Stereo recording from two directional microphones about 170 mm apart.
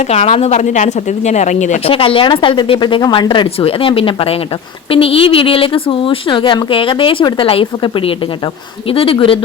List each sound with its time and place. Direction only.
0.1 s speech: 40° left (ahead or behind)